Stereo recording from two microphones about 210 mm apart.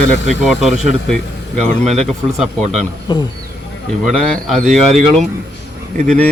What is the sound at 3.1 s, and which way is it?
Speech, 20° left (ahead or behind).